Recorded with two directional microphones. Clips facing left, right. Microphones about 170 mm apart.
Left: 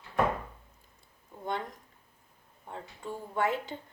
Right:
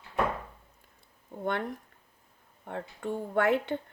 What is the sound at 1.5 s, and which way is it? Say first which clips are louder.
A woman's voice: right 4 dB; 65° right (ahead or behind).